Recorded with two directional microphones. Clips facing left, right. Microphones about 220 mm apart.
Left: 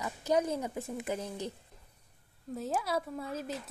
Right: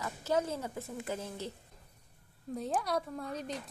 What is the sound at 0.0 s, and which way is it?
A woman's voice, 15° left (ahead or behind).